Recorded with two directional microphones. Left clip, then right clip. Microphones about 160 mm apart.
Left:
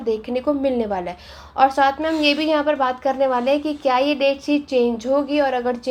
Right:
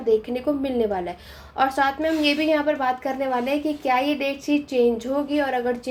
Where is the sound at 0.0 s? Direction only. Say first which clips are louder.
Even; 30° left (ahead or behind).